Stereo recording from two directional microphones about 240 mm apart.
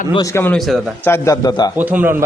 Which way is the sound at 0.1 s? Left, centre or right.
Centre.